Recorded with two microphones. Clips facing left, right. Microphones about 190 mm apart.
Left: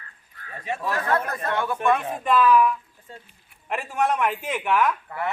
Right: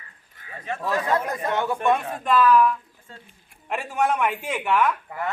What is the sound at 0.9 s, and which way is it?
Speech, 15° right (ahead or behind).